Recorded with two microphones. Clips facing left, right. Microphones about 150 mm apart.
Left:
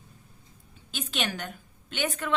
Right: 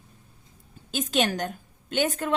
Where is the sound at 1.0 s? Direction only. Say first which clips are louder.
Right 8 dB; 45° right (ahead or behind).